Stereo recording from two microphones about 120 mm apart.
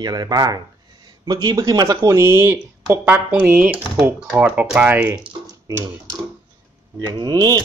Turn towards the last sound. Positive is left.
turn(degrees=-30)  # may be behind; listen again after turning